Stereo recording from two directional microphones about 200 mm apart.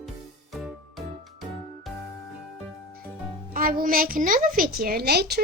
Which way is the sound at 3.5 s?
45° right (ahead or behind).